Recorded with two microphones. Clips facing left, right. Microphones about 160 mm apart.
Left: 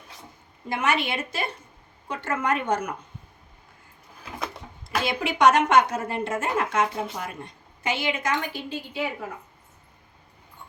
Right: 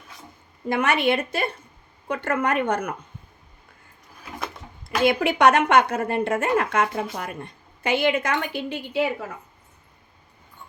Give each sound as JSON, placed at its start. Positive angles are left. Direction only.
{"t": 0.7, "sound": "a woman's voice", "side_deg": -60}
{"t": 5.0, "sound": "a woman's voice", "side_deg": -60}